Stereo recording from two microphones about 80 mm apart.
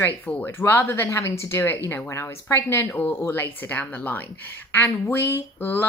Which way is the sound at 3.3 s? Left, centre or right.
Left.